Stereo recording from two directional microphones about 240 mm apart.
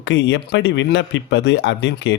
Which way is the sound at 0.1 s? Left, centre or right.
Left.